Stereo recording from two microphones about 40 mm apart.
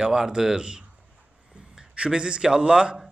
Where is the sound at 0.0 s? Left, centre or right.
Centre.